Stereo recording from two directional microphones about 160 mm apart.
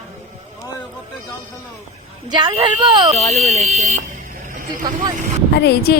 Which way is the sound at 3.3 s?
50° right (ahead or behind).